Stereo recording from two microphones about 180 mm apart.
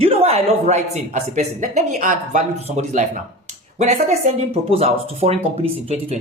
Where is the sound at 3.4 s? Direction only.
40° right (ahead or behind).